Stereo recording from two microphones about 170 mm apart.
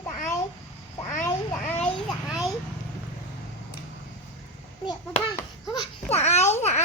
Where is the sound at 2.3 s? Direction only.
5° right (ahead or behind).